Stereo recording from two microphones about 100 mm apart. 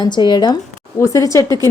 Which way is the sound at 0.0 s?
50° left (ahead or behind).